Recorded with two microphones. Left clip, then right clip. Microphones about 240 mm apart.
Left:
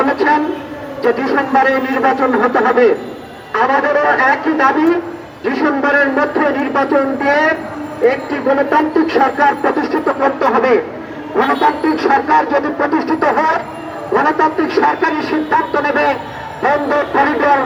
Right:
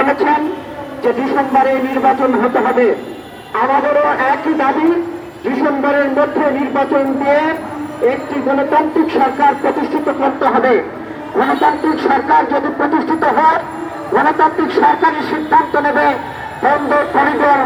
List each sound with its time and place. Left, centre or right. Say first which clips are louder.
0.0 s a sound: even; left
1.0 s a man's voice: even; left
8.7 s a man's voice: even; left